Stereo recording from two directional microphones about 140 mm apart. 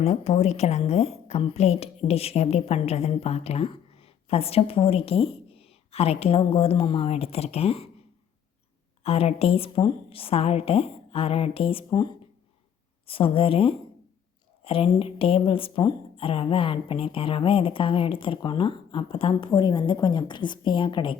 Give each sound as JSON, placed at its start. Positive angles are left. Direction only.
{"t": 0.0, "sound": "a woman's voice", "side_deg": 50}
{"t": 9.0, "sound": "a woman's voice", "side_deg": 45}